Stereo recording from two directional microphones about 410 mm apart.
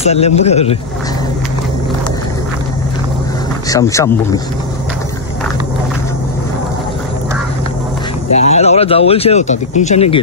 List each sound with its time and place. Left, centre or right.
0.0 s a man's voice: centre
3.6 s a man's voice: centre
8.4 s speech: centre